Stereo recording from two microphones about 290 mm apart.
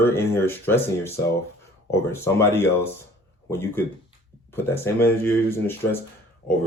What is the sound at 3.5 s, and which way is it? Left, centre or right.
Speech, centre.